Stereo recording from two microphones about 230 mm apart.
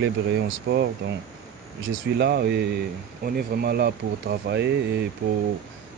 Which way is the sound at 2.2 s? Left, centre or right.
Right.